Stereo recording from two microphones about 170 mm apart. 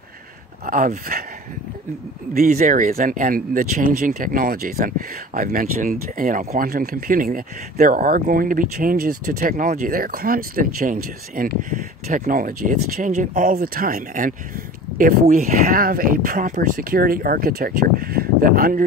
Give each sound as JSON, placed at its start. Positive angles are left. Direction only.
{"t": 0.7, "sound": "speech", "side_deg": -55}
{"t": 2.3, "sound": "speech", "side_deg": -60}